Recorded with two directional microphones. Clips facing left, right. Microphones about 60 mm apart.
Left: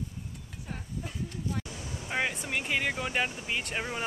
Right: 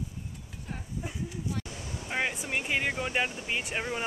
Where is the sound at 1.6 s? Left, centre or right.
Right.